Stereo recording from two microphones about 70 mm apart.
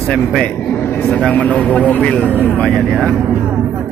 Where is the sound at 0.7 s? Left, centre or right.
Left.